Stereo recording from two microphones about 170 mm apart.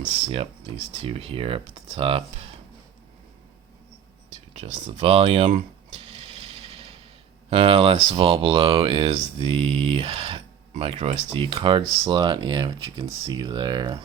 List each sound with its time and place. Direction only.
1.0 s speech: 35° right (ahead or behind)
4.5 s mechanisms: 40° right (ahead or behind)
7.5 s speech: 35° right (ahead or behind)